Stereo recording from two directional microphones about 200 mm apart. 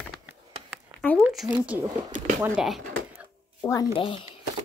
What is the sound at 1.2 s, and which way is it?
Speech, centre (ahead or behind).